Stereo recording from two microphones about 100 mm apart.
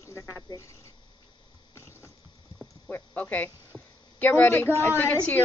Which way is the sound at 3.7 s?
10° left (ahead or behind).